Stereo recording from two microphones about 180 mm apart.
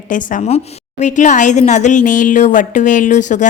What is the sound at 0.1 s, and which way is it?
A woman's voice, 40° left (ahead or behind).